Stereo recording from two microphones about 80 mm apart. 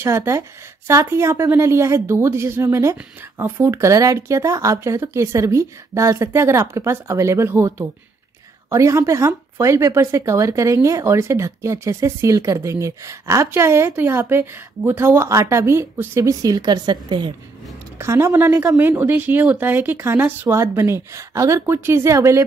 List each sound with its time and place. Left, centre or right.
0.0 s speech: right
16.2 s a woman's voice: right
17.9 s speech: right